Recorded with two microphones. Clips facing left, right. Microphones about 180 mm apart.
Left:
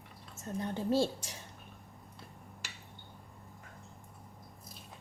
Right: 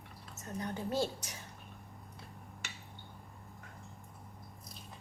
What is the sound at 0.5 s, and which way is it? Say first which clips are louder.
Speech: left 4 dB; 30° left (ahead or behind).